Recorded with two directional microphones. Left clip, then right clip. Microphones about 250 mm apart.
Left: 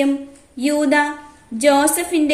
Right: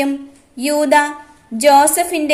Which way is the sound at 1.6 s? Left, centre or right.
Right.